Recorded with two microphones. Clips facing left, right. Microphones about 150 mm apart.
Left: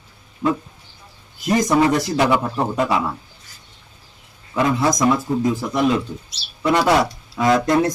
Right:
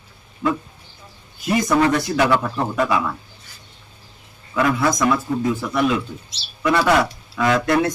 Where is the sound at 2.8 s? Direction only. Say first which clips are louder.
Right 1 dB; 30° left (ahead or behind).